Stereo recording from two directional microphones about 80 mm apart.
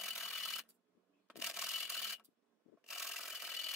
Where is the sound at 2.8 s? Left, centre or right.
Centre.